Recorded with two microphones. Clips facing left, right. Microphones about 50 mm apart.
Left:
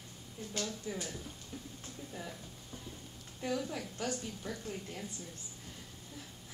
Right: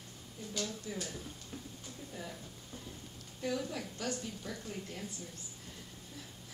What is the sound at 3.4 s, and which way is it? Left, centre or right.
A woman's voice, centre.